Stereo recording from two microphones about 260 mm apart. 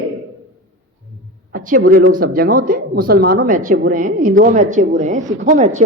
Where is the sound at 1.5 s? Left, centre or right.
Right.